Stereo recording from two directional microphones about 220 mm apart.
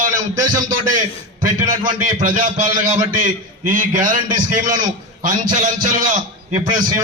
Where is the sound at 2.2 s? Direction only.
35° right (ahead or behind).